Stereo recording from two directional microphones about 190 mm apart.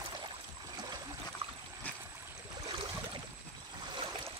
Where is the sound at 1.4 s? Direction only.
25° right (ahead or behind).